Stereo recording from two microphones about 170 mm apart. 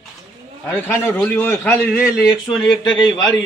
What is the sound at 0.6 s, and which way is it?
A man's voice, 10° left (ahead or behind).